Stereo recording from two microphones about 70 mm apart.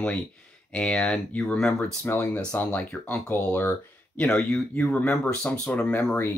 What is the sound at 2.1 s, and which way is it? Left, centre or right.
Speech, left.